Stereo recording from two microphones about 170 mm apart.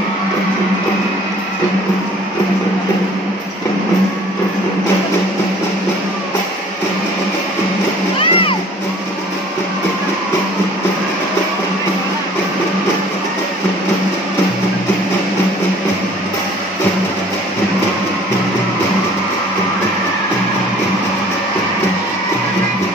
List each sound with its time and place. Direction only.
8.2 s music: 30° left (ahead or behind)